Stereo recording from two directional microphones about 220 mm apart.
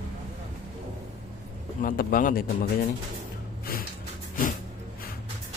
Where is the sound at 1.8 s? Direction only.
40° left (ahead or behind).